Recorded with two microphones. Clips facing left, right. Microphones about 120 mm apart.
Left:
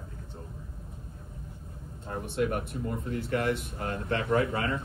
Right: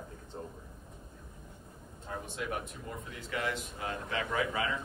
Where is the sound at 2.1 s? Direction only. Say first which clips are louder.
Left 8 dB; 55° left (ahead or behind).